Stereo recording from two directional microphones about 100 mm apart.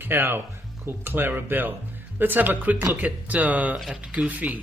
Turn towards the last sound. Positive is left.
turn(degrees=-15)  # may be behind; listen again after turning